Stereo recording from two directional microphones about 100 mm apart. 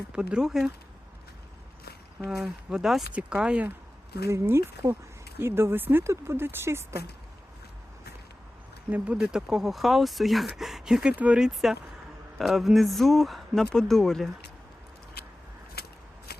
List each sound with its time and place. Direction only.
0.1 s speech: 10° right (ahead or behind)
2.2 s speech: 5° right (ahead or behind)
4.3 s speech: 25° right (ahead or behind)
9.1 s speech: 5° right (ahead or behind)